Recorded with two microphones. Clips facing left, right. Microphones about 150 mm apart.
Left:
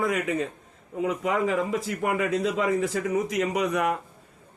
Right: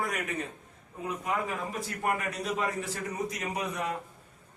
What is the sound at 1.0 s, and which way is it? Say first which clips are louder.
A man's voice: left 7 dB; 90° left.